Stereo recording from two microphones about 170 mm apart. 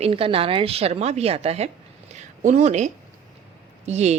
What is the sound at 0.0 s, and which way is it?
A woman's voice, 35° right (ahead or behind).